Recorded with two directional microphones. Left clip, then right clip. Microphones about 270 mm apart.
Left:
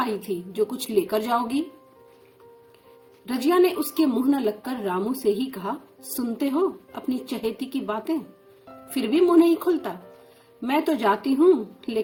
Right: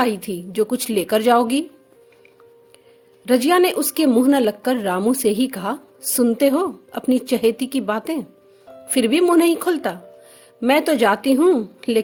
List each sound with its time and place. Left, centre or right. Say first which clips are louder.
0.6 s a woman's voice: right 4 dB; right
3.2 s a woman's voice: right 5 dB; right